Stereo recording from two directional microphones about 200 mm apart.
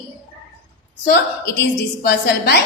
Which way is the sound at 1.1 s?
60° left (ahead or behind).